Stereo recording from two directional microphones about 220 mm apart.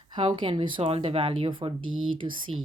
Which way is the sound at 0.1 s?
25° right (ahead or behind).